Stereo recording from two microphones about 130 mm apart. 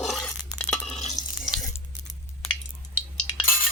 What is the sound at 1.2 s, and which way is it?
Sink, 30° left (ahead or behind).